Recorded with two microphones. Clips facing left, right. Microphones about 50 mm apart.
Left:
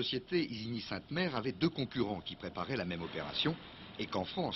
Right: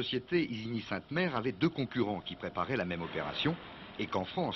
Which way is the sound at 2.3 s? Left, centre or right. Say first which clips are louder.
Right 4 dB; centre.